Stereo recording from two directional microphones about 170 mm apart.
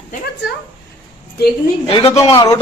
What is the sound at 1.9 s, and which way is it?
Speech, 35° left (ahead or behind).